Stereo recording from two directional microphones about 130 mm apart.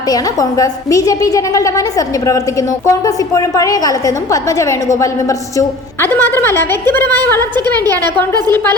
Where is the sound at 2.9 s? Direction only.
25° left (ahead or behind).